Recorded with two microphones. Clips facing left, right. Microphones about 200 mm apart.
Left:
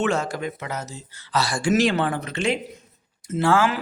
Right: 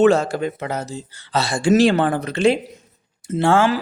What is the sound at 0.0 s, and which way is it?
A man's voice, 35° right (ahead or behind).